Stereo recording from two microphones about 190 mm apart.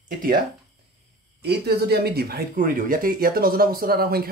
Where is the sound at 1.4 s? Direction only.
60° right (ahead or behind).